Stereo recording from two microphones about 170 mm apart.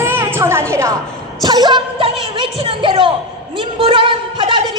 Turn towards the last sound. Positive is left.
turn(degrees=-30)  # may be behind; listen again after turning